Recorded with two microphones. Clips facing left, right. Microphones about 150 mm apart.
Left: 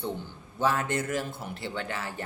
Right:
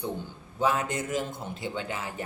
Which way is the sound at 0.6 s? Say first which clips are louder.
Even; 15° right (ahead or behind).